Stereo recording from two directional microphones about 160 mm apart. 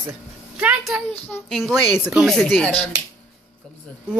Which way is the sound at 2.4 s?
10° left (ahead or behind).